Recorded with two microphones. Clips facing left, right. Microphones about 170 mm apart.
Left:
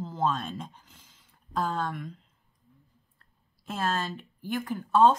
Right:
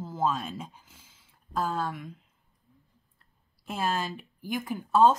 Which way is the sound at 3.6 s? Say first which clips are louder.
Even; 10° right (ahead or behind).